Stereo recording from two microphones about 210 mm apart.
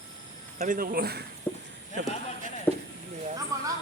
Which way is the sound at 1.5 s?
10° left (ahead or behind).